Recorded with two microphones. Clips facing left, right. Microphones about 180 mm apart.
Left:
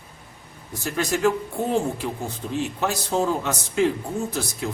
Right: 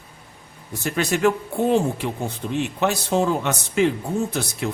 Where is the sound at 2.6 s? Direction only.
65° right (ahead or behind).